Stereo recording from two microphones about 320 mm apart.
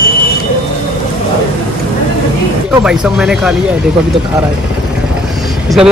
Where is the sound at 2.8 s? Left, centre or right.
Centre.